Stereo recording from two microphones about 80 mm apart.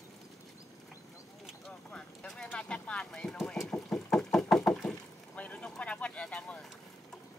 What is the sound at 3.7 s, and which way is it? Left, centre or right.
Knock, centre.